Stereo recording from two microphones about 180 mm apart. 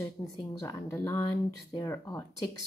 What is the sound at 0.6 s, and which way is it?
Speech, 15° left (ahead or behind).